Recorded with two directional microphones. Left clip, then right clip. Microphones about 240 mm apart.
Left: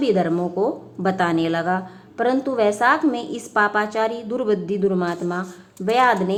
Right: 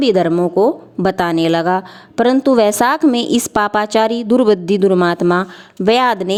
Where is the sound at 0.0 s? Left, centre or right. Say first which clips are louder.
Right 7 dB; right.